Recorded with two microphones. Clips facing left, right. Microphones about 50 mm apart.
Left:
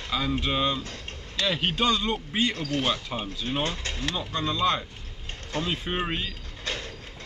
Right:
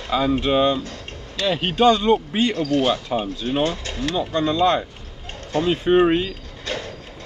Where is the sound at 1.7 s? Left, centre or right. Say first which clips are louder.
Right 12 dB; right.